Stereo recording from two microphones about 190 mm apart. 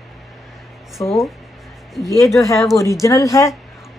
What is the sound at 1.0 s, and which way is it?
Speech, 10° left (ahead or behind).